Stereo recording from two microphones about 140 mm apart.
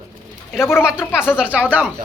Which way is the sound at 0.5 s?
15° left (ahead or behind).